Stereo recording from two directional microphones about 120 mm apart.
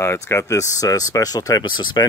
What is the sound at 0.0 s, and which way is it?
Speech, 25° left (ahead or behind).